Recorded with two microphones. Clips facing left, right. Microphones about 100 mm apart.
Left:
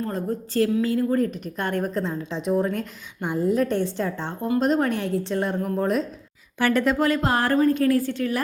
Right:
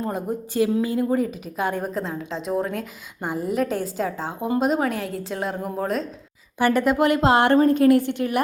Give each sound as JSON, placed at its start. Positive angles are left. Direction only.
{"t": 0.0, "sound": "a woman's voice", "side_deg": -15}
{"t": 7.6, "sound": "a woman's voice", "side_deg": -35}
{"t": 7.9, "sound": "a woman's voice", "side_deg": -20}